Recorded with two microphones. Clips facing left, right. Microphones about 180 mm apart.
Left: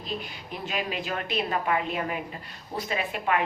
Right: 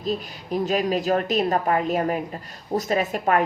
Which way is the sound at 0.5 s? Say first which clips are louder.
Right 10 dB; 40° right (ahead or behind).